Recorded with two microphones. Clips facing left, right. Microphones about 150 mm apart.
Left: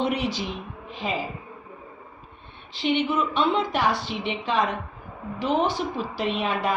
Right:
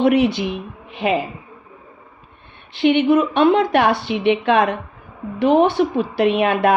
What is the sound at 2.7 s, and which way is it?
A woman's voice, 60° right (ahead or behind).